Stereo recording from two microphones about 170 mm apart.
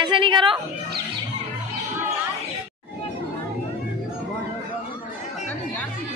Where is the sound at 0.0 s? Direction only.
30° right (ahead or behind).